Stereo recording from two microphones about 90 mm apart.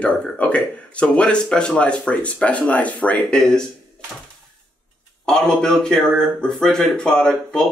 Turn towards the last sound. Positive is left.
turn(degrees=10)  # may be behind; listen again after turning